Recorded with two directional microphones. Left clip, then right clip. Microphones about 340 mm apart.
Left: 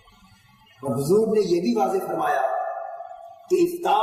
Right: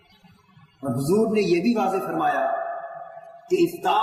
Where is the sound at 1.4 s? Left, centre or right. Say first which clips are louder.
Left 1 dB; centre.